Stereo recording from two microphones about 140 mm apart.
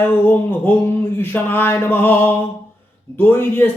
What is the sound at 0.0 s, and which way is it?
A man's voice, 15° left (ahead or behind).